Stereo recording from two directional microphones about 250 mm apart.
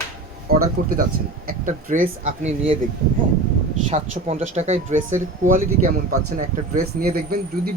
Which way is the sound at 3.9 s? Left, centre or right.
Right.